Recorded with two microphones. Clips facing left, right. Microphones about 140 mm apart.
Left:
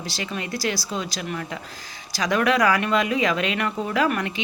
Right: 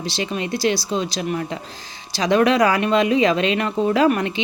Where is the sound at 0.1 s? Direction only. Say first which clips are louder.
Right 6 dB; 25° right (ahead or behind).